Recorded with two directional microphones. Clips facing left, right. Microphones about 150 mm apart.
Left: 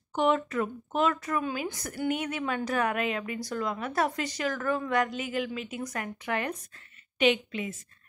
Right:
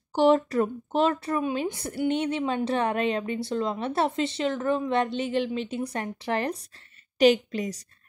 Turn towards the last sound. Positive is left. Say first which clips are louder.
# right 5 dB
turn(degrees=-35)  # may be behind; listen again after turning